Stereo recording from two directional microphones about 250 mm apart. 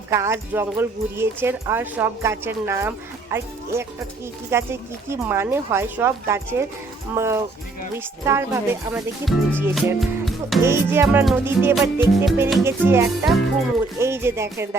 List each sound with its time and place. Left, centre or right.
0.1 s speech: centre